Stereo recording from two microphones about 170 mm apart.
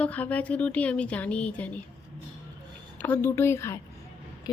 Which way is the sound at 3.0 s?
10° left (ahead or behind).